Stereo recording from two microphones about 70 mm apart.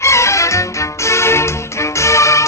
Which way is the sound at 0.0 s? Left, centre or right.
Left.